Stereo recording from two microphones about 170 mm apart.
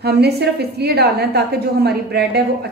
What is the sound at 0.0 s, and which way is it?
A woman's voice, 75° right (ahead or behind).